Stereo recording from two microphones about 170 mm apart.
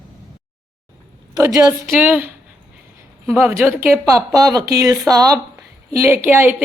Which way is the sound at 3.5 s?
15° right (ahead or behind).